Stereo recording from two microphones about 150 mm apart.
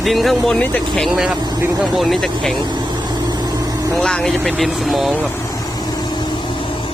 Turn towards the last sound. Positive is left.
turn(degrees=-5)  # may be behind; listen again after turning